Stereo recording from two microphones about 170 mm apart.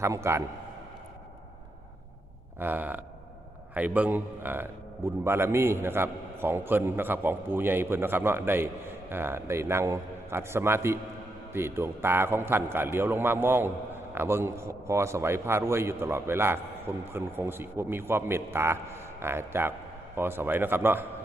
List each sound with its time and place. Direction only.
0.0 s a man's voice: 15° right (ahead or behind)
2.6 s a man's voice: 10° right (ahead or behind)